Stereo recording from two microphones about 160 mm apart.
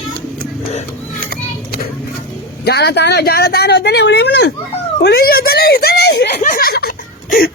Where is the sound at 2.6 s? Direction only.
90° left.